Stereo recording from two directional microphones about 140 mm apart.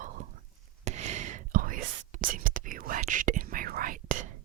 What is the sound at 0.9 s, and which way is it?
Whispering, 55° right (ahead or behind).